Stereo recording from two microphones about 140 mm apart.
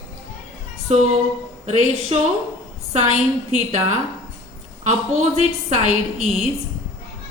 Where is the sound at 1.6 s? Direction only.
50° right (ahead or behind).